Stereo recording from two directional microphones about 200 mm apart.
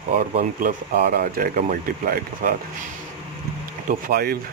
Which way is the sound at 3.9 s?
45° right (ahead or behind).